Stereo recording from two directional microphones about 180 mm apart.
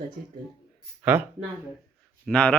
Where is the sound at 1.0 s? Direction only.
10° right (ahead or behind).